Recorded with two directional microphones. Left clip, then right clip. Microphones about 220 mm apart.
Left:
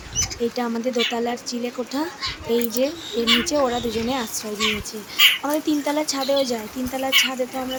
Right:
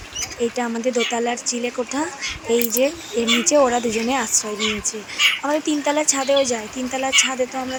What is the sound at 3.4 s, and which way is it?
Speech, 10° right (ahead or behind).